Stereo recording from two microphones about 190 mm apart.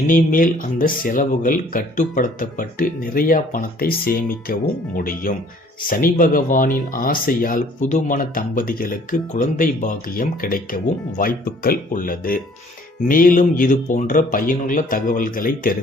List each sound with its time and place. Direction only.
0.1 s speech: 45° left (ahead or behind)